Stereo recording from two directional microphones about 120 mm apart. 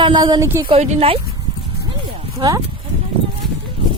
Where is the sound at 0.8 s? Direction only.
60° right (ahead or behind).